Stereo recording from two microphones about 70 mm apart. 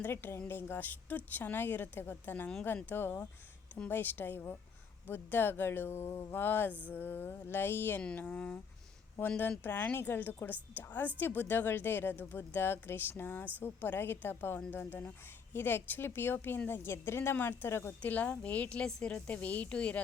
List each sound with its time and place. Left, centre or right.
0.0 s speech: left
8.0 s a woman's voice: centre
9.6 s speech: left
18.0 s a woman's voice: left
19.3 s speech: left